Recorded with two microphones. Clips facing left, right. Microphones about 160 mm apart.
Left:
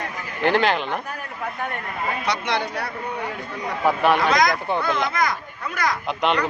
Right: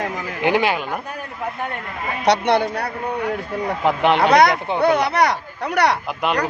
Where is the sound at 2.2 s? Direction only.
65° right (ahead or behind).